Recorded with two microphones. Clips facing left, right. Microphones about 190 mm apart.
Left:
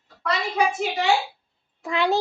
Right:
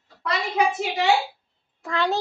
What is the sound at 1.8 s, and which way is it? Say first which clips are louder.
Speech: left 2 dB; 15° left (ahead or behind).